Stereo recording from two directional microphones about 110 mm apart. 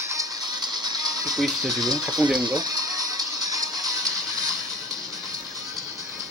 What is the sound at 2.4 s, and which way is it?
Music, 35° right (ahead or behind).